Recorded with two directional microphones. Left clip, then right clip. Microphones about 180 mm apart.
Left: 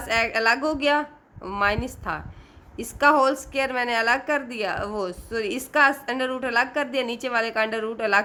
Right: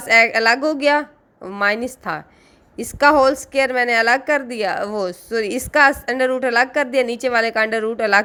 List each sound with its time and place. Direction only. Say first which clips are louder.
0.0 s a woman's voice: right 8 dB; 25° right (ahead or behind)